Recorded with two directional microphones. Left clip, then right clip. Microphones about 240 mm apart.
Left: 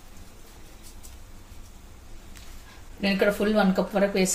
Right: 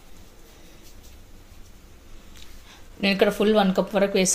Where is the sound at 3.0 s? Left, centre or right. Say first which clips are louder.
Right 3 dB; right.